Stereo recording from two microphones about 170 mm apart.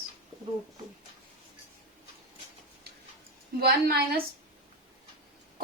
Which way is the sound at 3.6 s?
65° right (ahead or behind).